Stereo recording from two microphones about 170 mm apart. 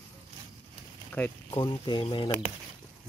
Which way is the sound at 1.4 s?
25° left (ahead or behind).